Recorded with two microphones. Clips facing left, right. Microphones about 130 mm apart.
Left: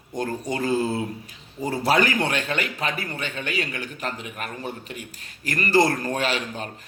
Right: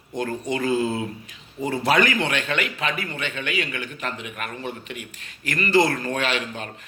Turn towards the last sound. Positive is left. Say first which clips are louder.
# even
turn(degrees=40)  # may be behind; listen again after turning